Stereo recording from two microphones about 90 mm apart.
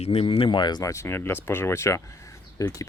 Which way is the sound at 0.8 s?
35° left (ahead or behind).